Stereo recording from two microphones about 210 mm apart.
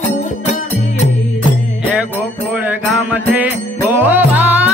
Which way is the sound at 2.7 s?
5° right (ahead or behind).